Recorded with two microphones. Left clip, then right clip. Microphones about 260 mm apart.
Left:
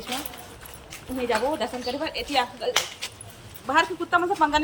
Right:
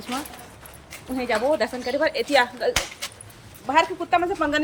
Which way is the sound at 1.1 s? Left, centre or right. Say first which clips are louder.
Right 3 dB; centre.